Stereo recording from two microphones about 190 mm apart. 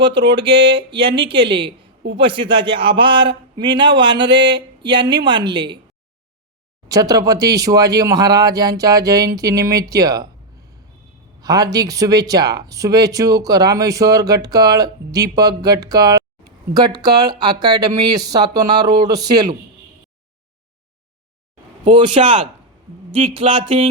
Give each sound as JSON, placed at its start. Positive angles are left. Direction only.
{"t": 0.0, "sound": "speech", "side_deg": -25}
{"t": 6.8, "sound": "speech", "side_deg": -20}
{"t": 11.3, "sound": "speech", "side_deg": -20}
{"t": 21.8, "sound": "speech", "side_deg": -25}